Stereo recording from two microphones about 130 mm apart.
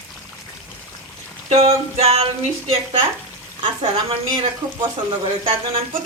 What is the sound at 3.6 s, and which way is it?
Speech, 40° right (ahead or behind).